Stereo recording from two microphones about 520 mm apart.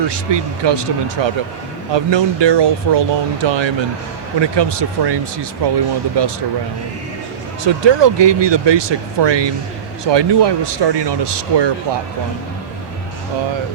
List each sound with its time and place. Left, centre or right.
0.0 s speech: right
7.6 s speech: right